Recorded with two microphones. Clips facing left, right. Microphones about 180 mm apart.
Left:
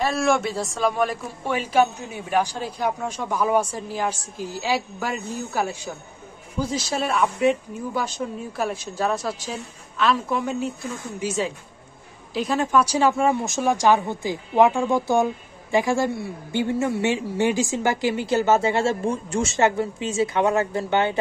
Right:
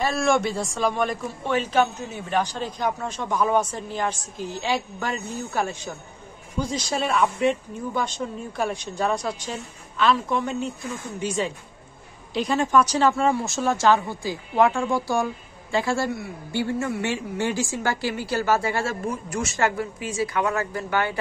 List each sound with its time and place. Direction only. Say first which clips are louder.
0.0 s a man's voice: even; centre (ahead or behind); by 21.2 s 25° left (ahead or behind)